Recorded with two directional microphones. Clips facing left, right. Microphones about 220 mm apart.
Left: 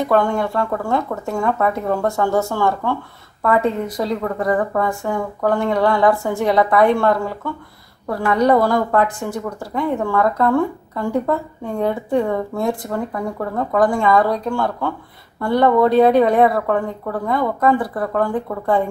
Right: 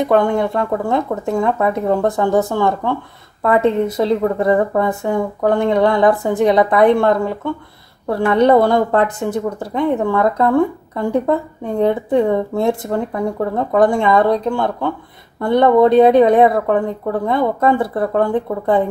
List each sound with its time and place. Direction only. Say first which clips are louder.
0.0 s a woman's voice: right 3 dB; 20° right (ahead or behind)